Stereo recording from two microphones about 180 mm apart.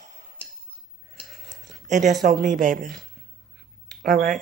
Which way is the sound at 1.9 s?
45° right (ahead or behind).